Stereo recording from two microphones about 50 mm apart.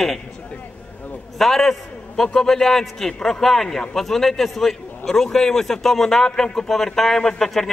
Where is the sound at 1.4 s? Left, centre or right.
Centre.